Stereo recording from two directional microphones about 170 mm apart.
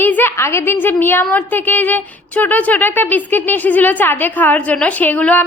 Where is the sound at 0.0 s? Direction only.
10° left (ahead or behind).